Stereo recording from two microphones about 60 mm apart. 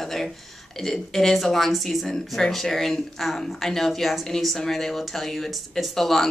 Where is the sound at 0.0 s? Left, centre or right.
Centre.